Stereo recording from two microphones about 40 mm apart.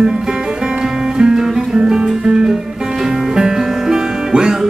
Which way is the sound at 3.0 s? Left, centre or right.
Centre.